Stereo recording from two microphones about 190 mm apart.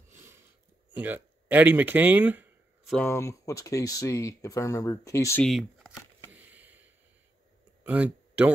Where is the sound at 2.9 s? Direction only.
15° left (ahead or behind).